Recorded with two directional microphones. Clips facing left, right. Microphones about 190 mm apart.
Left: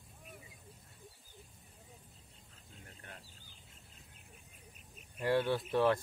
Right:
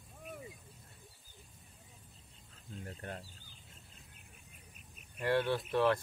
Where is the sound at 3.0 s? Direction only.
45° right (ahead or behind).